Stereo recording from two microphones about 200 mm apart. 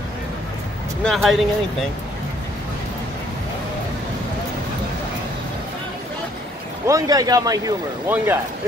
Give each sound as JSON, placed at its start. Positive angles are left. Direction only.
{"t": 1.0, "sound": "speech", "side_deg": 0}
{"t": 6.9, "sound": "a man's voice", "side_deg": -20}